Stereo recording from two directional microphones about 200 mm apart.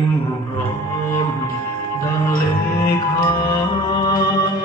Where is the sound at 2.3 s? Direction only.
15° left (ahead or behind).